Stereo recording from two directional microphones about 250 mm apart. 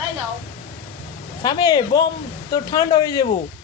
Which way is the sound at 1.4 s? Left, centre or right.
Centre.